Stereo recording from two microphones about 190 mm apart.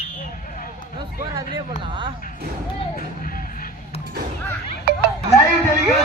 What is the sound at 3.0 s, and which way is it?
Music, 50° left (ahead or behind).